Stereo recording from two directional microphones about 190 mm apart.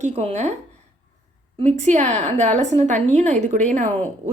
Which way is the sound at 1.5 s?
40° right (ahead or behind).